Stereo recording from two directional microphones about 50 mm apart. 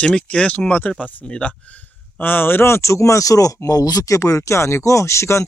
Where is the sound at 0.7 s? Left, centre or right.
Left.